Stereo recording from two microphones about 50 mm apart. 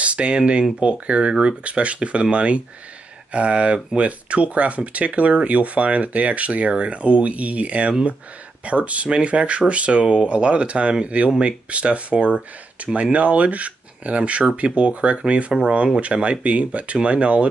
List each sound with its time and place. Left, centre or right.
0.0 s speech: right